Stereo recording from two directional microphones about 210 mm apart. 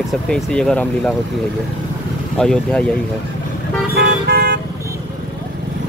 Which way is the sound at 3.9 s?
50° right (ahead or behind).